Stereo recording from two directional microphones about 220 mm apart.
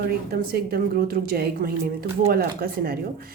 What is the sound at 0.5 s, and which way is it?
Speech, 45° right (ahead or behind).